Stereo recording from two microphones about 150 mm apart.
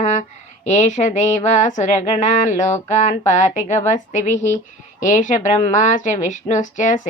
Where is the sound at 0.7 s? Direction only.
50° left (ahead or behind).